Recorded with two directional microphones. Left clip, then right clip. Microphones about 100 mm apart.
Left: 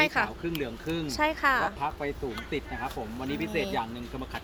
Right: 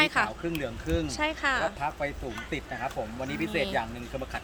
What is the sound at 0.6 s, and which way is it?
Speech, 30° right (ahead or behind).